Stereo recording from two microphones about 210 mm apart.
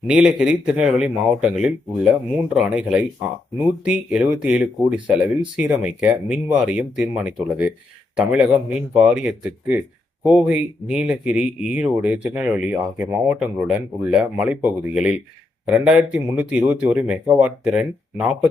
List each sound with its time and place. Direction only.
0.1 s speech: 5° right (ahead or behind)